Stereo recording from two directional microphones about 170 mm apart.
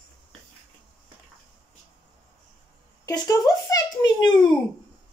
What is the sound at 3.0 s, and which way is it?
Speech, 20° left (ahead or behind).